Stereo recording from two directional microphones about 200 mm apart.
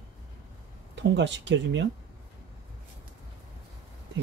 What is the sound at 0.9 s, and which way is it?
Speech, 60° right (ahead or behind).